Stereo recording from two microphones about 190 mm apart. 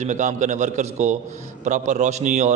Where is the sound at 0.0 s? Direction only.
40° right (ahead or behind).